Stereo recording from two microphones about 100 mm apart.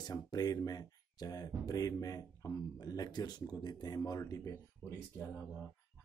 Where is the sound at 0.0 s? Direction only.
40° left (ahead or behind).